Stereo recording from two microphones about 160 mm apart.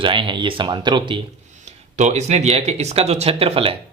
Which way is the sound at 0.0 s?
30° right (ahead or behind).